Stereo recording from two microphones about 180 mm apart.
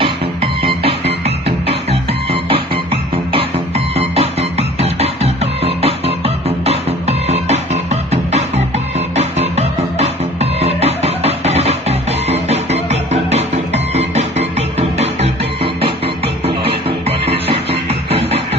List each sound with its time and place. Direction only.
0.8 s music: 35° right (ahead or behind)